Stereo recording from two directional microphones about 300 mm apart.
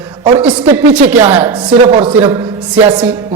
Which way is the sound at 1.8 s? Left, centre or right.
Centre.